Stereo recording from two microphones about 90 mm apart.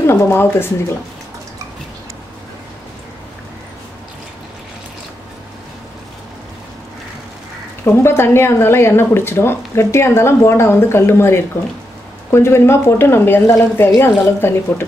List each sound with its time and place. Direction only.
0.0 s speech: 30° left (ahead or behind)
7.8 s speech: 25° left (ahead or behind)